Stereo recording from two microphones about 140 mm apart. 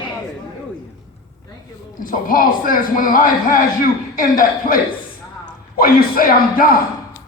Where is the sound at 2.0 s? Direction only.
85° left.